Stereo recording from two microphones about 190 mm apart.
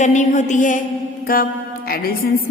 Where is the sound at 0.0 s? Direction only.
40° left (ahead or behind).